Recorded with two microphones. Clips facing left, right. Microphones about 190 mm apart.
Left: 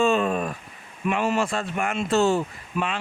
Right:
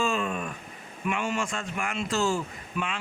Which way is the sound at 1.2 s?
60° left (ahead or behind).